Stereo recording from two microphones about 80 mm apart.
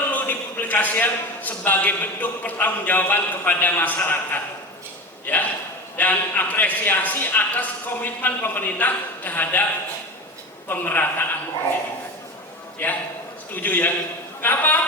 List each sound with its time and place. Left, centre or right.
0.1 s a man's voice: left
10.7 s a man's voice: left
12.8 s a man's voice: left